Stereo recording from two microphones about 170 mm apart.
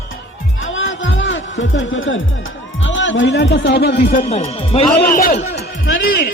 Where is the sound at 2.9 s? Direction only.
90° left; by 4.1 s 70° left (ahead or behind).